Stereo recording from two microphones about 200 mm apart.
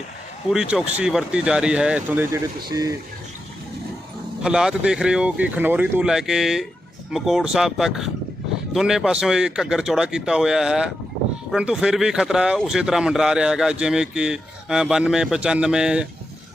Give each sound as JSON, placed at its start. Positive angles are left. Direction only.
{"t": 0.5, "sound": "speech", "side_deg": -5}
{"t": 4.4, "sound": "speech", "side_deg": -5}